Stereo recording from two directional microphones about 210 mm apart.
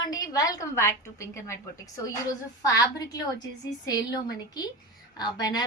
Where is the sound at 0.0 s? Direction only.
15° left (ahead or behind).